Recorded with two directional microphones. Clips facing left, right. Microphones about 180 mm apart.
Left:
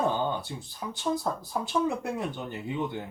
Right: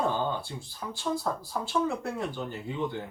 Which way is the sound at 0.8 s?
15° left (ahead or behind).